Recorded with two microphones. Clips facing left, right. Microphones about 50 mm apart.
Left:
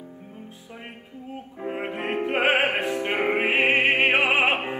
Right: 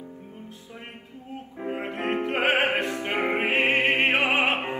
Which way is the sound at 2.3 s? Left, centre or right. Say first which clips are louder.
Left 2 dB; left.